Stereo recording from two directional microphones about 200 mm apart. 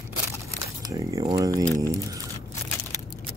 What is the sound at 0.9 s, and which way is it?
Speech, 15° right (ahead or behind).